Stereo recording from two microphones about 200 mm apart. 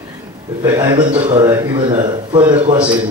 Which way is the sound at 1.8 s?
40° right (ahead or behind).